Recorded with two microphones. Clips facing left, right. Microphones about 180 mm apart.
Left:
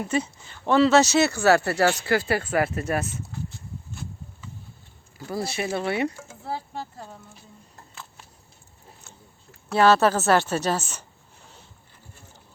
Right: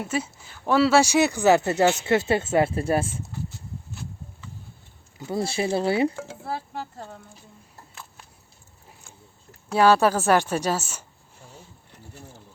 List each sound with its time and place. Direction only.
0.0 s speech: 5° right (ahead or behind); by 3.2 s 30° right (ahead or behind)
5.3 s speech: 25° right (ahead or behind)
9.7 s speech: 10° right (ahead or behind)